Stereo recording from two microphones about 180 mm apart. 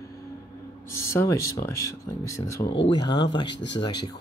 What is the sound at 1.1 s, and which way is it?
Speech, 15° left (ahead or behind).